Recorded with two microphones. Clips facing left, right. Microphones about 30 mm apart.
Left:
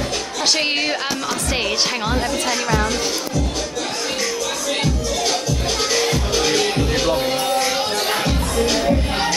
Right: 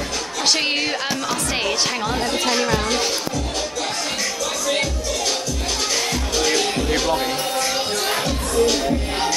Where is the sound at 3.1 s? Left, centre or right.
Centre.